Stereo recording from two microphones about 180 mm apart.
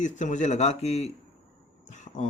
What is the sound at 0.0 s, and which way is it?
Speech, 40° left (ahead or behind).